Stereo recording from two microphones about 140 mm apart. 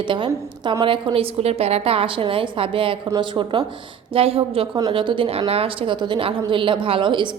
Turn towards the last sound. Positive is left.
turn(degrees=-35)  # may be behind; listen again after turning